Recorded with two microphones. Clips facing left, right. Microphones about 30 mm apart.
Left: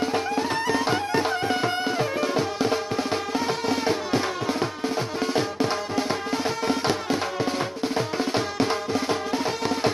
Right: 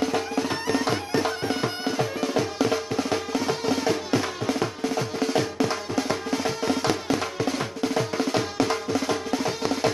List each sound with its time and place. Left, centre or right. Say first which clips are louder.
0.0 s music: left 1 dB; left